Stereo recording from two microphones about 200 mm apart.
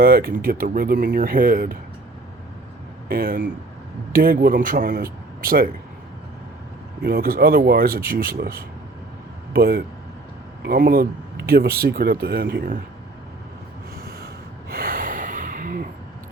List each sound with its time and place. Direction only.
0.0 s speech: 50° right (ahead or behind)
3.1 s speech: 45° right (ahead or behind)
7.0 s speech: 50° right (ahead or behind)
14.7 s gasp: 45° right (ahead or behind)